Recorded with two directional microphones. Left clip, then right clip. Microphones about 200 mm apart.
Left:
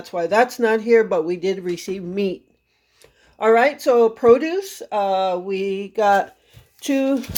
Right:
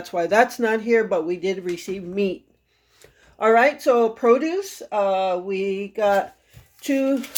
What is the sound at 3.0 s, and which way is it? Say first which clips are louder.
Speech: left 1 dB; 10° left (ahead or behind).